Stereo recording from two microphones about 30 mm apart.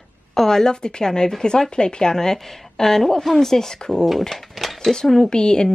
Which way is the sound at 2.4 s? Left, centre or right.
Centre.